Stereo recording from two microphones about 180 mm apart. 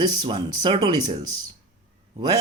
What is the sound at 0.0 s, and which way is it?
Speech, 25° right (ahead or behind).